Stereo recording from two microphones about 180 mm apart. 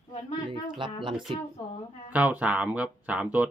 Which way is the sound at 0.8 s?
25° right (ahead or behind).